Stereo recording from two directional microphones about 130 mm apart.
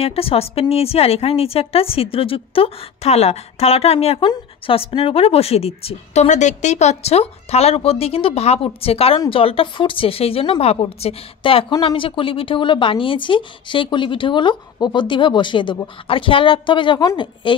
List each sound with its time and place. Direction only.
0.0 s speech: 50° left (ahead or behind)